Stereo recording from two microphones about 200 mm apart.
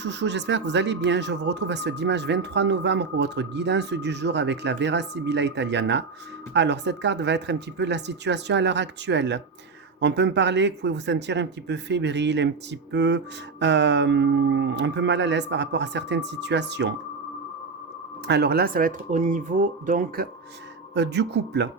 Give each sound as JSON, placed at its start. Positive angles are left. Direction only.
{"t": 0.0, "sound": "speech", "side_deg": -60}
{"t": 18.3, "sound": "speech", "side_deg": -55}
{"t": 20.9, "sound": "speech", "side_deg": -60}